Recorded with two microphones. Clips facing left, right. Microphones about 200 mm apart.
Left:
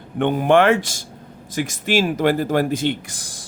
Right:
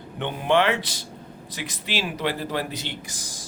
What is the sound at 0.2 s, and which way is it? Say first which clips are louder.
A man's voice: left 7 dB; 50° left (ahead or behind).